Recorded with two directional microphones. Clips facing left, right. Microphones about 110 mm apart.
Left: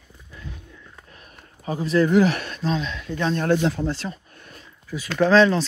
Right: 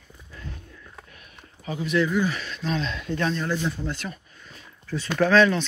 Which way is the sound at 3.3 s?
60° left (ahead or behind).